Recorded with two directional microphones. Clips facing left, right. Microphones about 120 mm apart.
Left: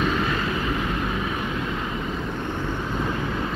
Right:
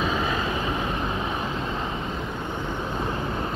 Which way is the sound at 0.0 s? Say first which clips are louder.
Left 1 dB; 15° right (ahead or behind).